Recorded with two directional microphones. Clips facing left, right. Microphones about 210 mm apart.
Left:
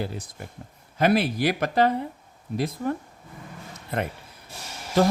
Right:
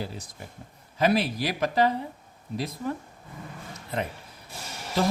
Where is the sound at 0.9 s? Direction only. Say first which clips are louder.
Left 2 dB; 55° left (ahead or behind).